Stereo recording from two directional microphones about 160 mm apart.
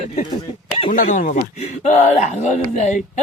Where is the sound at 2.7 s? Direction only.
45° left (ahead or behind).